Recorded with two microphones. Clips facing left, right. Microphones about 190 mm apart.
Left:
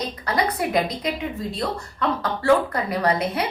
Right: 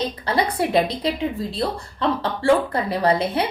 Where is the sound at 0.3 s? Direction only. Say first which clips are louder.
Right 1 dB; 30° right (ahead or behind).